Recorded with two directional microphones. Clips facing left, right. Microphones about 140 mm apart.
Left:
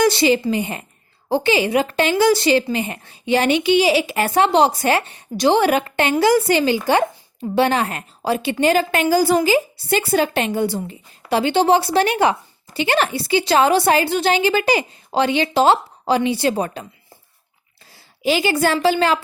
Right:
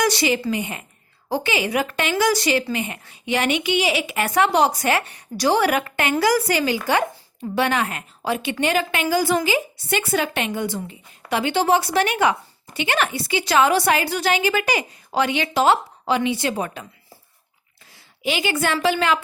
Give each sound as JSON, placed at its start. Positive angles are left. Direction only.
{"t": 0.0, "sound": "a woman's voice", "side_deg": 30}
{"t": 17.9, "sound": "a woman's voice", "side_deg": 35}